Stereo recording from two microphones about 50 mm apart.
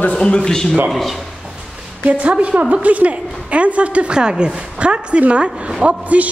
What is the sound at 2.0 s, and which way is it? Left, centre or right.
A woman's voice, right.